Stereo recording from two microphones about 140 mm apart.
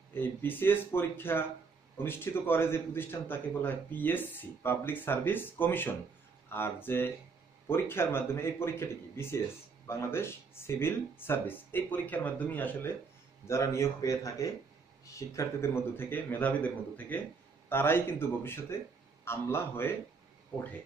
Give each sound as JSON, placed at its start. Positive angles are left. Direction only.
{"t": 0.1, "sound": "a man's voice", "side_deg": 15}